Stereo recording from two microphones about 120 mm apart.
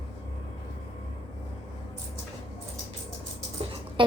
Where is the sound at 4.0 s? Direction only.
45° right (ahead or behind).